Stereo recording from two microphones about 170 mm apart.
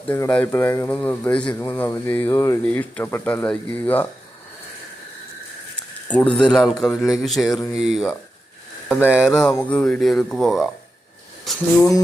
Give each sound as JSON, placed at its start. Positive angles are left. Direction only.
{"t": 0.1, "sound": "speech", "side_deg": 10}
{"t": 6.1, "sound": "speech", "side_deg": 10}
{"t": 9.4, "sound": "speech", "side_deg": 5}
{"t": 11.8, "sound": "music", "side_deg": 20}